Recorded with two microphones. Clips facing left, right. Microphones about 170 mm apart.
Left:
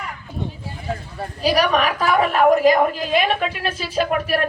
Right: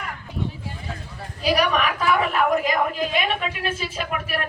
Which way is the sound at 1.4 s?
35° left (ahead or behind).